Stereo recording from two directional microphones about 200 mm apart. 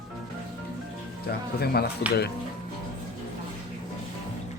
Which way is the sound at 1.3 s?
50° left (ahead or behind).